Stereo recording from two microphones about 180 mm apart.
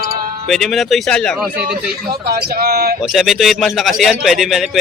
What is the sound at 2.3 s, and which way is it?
Speech, 60° right (ahead or behind).